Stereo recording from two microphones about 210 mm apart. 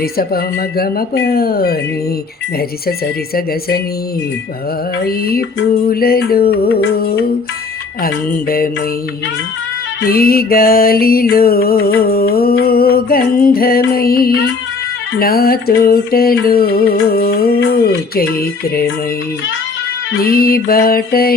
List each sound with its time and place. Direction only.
0.0 s mantra: 45° left (ahead or behind)
5.0 s mantra: 45° left (ahead or behind)
10.0 s mantra: 45° left (ahead or behind)
20.1 s mantra: 45° left (ahead or behind)